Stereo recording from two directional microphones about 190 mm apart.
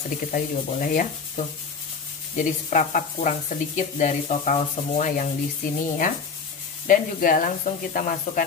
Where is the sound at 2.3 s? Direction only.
40° left (ahead or behind).